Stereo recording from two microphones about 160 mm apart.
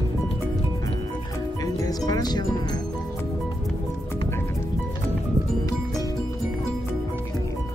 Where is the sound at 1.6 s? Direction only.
25° left (ahead or behind).